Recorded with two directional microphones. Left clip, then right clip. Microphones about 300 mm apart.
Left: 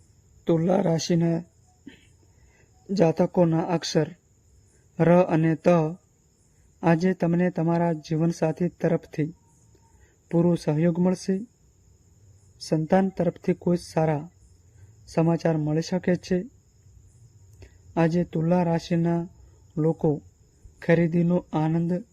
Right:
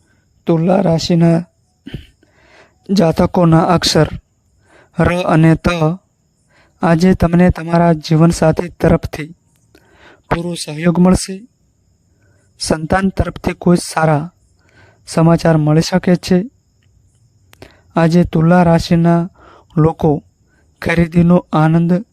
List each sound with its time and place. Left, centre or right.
0.4 s speech: right
5.2 s speech: right
6.7 s speech: right
10.4 s speech: centre
10.8 s speech: right
12.5 s speech: right
17.6 s speech: right